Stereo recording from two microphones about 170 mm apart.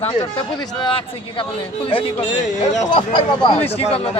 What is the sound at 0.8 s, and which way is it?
A man's voice, 30° left (ahead or behind).